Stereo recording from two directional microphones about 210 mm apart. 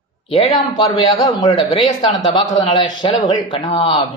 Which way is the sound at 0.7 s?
25° left (ahead or behind).